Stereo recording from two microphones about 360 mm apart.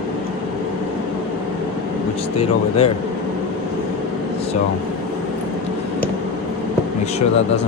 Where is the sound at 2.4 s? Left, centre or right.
Centre.